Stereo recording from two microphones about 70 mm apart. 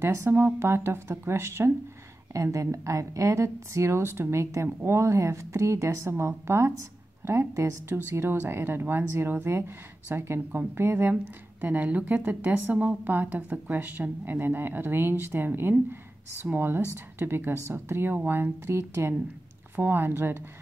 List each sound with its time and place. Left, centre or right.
0.0 s a woman's voice: right
11.6 s a woman's voice: right